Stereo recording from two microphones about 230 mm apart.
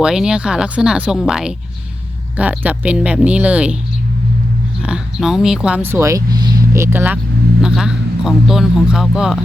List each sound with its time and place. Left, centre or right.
0.0 s speech: centre
4.8 s speech: centre